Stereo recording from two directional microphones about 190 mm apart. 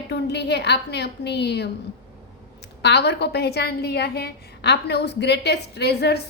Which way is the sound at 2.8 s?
60° left (ahead or behind).